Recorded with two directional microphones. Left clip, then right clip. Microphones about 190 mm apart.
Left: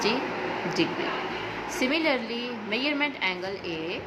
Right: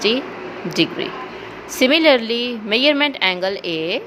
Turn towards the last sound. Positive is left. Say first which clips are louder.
# right 10 dB
turn(degrees=-45)  # may be behind; listen again after turning